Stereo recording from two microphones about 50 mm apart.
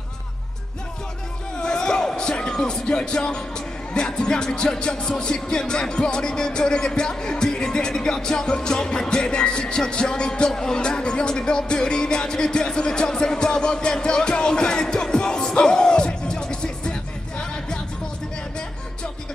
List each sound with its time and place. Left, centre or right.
1.6 s speech: centre